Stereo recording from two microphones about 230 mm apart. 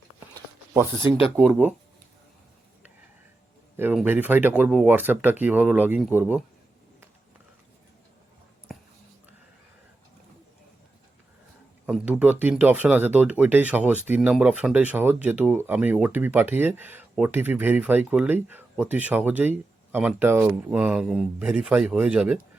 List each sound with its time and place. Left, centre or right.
0.3 s a sound: centre
1.4 s speech: centre
3.8 s speech: centre
8.7 s whispering: centre
11.9 s speech: centre